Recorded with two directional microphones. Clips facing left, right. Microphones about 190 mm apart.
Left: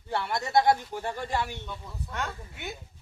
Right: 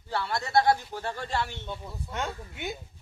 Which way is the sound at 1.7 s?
20° right (ahead or behind).